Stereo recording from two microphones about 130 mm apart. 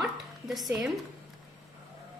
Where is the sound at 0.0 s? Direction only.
Centre (ahead or behind).